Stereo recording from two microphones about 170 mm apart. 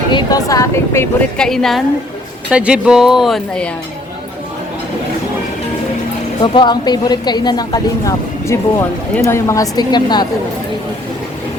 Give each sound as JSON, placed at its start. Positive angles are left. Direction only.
{"t": 0.1, "sound": "speech", "side_deg": 25}
{"t": 1.4, "sound": "speech", "side_deg": 0}
{"t": 6.4, "sound": "speech", "side_deg": 30}